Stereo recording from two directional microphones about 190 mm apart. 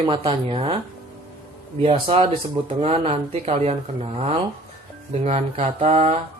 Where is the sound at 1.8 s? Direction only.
30° right (ahead or behind).